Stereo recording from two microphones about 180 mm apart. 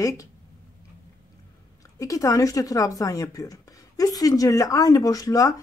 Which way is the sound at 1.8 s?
20° left (ahead or behind).